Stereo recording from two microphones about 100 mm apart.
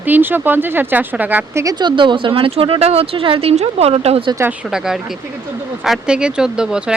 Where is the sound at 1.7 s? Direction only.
55° right (ahead or behind); by 4.3 s 80° right.